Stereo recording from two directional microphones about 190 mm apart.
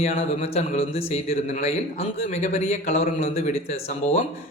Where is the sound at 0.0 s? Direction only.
35° left (ahead or behind).